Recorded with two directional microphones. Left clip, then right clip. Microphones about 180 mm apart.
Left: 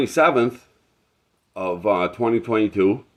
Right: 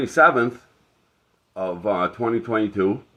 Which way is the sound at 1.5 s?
35° left (ahead or behind).